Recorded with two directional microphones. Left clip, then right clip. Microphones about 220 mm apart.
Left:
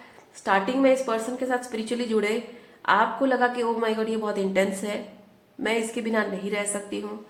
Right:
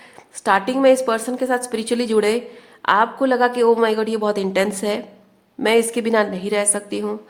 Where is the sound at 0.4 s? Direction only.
50° right (ahead or behind).